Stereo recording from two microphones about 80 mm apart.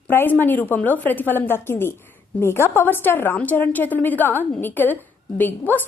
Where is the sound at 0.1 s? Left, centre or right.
Left.